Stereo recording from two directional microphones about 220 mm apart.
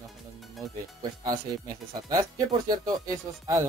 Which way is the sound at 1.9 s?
15° right (ahead or behind).